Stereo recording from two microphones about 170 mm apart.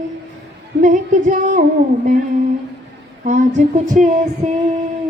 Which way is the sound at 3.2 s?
45° right (ahead or behind).